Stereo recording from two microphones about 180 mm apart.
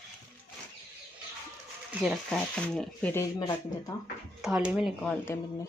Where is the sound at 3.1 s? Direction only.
15° left (ahead or behind).